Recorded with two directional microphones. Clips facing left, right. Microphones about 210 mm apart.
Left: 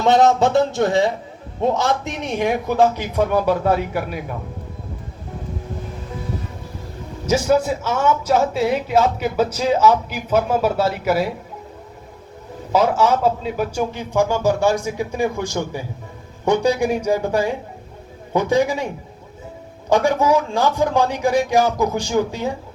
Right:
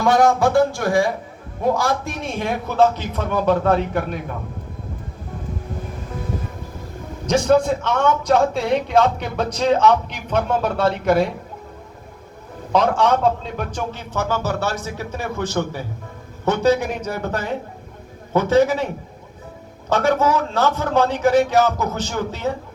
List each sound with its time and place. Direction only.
0.0 s speech: 25° left (ahead or behind)
7.3 s speech: 5° left (ahead or behind)
12.7 s speech: 5° left (ahead or behind)
19.9 s speech: 15° left (ahead or behind)